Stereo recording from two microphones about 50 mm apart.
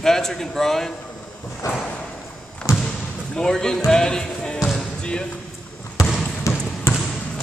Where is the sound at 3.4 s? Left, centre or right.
Centre.